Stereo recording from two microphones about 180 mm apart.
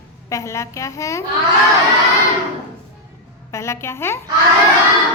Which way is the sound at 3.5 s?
15° left (ahead or behind).